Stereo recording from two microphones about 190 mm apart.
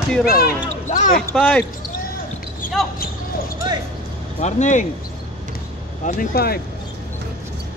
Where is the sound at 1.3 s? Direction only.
5° left (ahead or behind).